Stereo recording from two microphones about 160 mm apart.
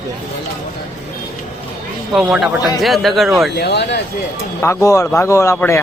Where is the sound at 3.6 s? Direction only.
90° left.